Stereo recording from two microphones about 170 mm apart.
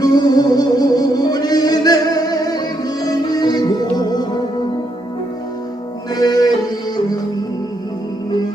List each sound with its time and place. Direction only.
0.0 s music: 25° left (ahead or behind)
6.1 s music: 20° left (ahead or behind)